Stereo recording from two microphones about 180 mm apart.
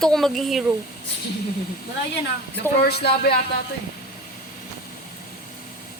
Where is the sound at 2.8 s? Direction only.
60° left (ahead or behind).